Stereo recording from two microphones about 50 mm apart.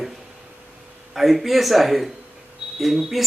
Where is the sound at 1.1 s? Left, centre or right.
Centre.